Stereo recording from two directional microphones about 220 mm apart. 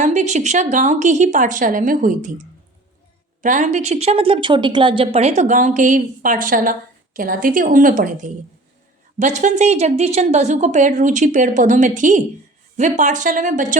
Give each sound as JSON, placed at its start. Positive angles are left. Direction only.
{"t": 0.0, "sound": "a woman's voice", "side_deg": -35}
{"t": 3.4, "sound": "a woman's voice", "side_deg": -35}